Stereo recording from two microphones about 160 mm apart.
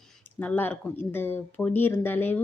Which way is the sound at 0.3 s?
10° left (ahead or behind).